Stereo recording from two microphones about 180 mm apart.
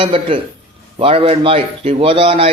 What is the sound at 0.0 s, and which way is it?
A man's voice, 30° right (ahead or behind).